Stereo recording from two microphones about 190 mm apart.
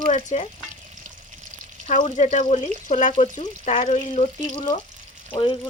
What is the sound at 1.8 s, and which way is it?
Speech, 40° left (ahead or behind).